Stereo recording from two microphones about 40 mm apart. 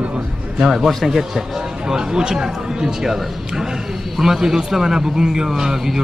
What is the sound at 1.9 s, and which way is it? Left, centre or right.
A man's voice, centre.